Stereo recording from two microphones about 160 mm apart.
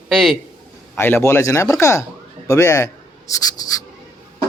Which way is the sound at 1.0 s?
15° left (ahead or behind).